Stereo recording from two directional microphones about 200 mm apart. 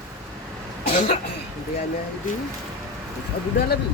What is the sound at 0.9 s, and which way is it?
Speech, 35° left (ahead or behind).